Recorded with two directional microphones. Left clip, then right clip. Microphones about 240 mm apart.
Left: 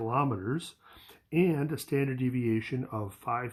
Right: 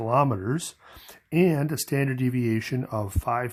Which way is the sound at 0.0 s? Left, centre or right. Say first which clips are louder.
Right 7 dB; right.